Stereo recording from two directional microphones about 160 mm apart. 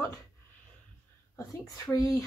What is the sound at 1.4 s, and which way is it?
Speech, 20° left (ahead or behind).